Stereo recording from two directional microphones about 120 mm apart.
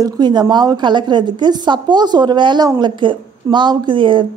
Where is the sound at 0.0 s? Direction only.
35° right (ahead or behind).